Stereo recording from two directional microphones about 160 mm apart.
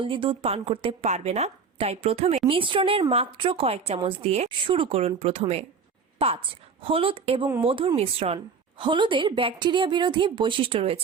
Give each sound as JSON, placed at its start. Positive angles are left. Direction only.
{"t": 0.0, "sound": "a woman's voice", "side_deg": -30}